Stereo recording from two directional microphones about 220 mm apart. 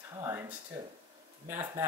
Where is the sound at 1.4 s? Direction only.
10° right (ahead or behind).